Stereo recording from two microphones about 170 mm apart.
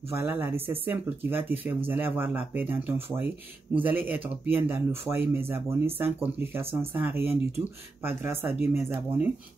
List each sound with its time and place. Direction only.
0.1 s speech: 15° right (ahead or behind)